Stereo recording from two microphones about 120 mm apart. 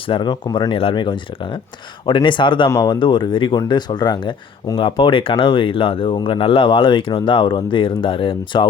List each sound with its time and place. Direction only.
0.1 s speech: 40° left (ahead or behind)
0.7 s speech: 50° left (ahead or behind)
2.6 s speech: 30° left (ahead or behind); by 8.6 s 45° left (ahead or behind)